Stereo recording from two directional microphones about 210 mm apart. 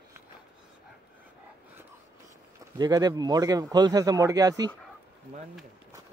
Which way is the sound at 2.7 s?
20° right (ahead or behind).